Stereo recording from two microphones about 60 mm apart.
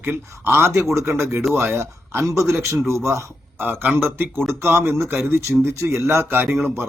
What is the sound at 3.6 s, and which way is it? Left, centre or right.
A man's voice, right.